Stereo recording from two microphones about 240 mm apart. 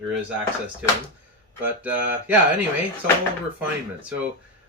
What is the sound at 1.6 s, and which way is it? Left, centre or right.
Speech, centre.